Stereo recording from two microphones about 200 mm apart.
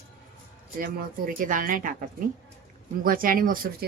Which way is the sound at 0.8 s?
45° right (ahead or behind).